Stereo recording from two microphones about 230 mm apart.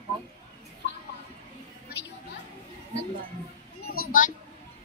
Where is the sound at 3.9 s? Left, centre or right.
Left.